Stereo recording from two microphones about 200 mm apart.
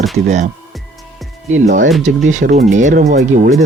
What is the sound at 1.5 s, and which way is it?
Speech, 35° right (ahead or behind).